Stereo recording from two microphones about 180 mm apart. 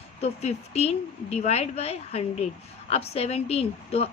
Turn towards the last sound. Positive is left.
turn(degrees=35)  # may be behind; listen again after turning